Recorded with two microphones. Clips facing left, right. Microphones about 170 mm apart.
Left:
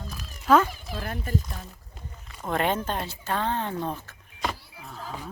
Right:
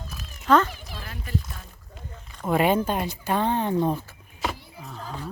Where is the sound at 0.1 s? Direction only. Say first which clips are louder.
Even; 5° left (ahead or behind).